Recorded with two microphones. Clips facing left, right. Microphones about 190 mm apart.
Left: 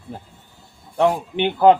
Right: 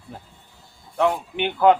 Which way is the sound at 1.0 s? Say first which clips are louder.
Left 3 dB; 30° left (ahead or behind).